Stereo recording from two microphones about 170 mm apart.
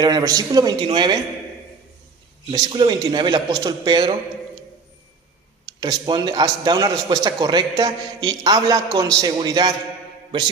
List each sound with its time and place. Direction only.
0.0 s a man's voice: 20° right (ahead or behind)
2.5 s a man's voice: 30° right (ahead or behind)
5.8 s a man's voice: 25° right (ahead or behind)